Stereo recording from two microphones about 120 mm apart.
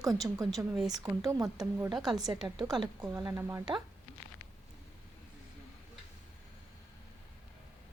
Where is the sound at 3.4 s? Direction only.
20° right (ahead or behind).